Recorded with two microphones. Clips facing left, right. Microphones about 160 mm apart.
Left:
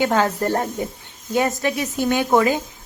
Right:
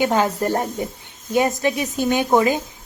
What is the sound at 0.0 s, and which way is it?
A woman's voice, 15° right (ahead or behind).